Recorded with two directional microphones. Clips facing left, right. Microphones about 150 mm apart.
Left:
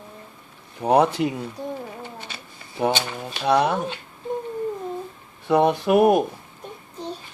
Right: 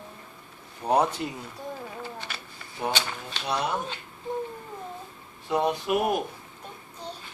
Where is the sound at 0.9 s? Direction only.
70° left (ahead or behind).